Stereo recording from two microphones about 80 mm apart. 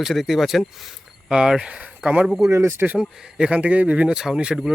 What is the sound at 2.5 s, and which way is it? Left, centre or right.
Speech, right.